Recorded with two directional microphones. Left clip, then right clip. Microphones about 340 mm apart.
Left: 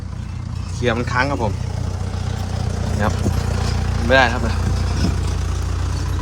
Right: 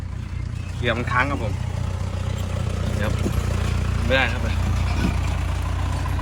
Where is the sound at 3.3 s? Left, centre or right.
Right.